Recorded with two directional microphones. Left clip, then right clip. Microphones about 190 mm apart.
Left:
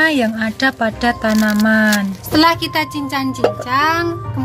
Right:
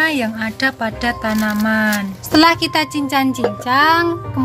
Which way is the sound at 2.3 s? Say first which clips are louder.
Right 1 dB; 45° right (ahead or behind).